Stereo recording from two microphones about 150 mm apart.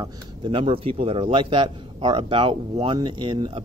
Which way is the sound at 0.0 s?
35° right (ahead or behind).